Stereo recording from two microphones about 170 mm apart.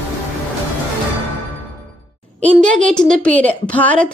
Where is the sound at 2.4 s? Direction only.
5° left (ahead or behind).